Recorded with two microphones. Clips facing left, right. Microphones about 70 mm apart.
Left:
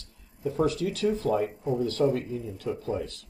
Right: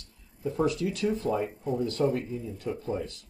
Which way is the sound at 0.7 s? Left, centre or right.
Left.